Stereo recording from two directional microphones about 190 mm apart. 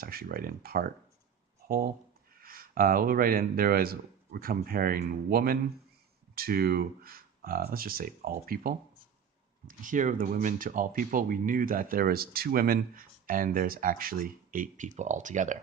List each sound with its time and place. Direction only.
0.0 s speech: 50° right (ahead or behind)